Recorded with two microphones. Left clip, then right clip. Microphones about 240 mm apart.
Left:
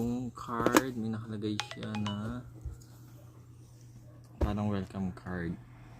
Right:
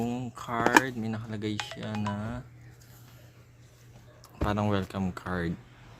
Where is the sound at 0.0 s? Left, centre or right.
Right.